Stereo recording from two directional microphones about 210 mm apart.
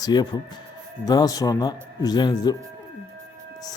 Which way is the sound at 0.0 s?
20° left (ahead or behind).